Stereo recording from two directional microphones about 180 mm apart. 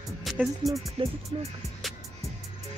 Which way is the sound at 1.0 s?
30° right (ahead or behind).